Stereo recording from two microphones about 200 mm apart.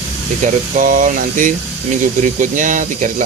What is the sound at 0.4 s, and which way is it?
Speech, 40° right (ahead or behind).